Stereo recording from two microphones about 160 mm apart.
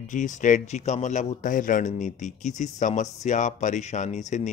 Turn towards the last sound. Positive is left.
turn(degrees=50)  # may be behind; listen again after turning